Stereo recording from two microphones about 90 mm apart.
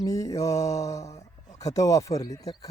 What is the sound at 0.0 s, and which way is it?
Speech, 40° left (ahead or behind).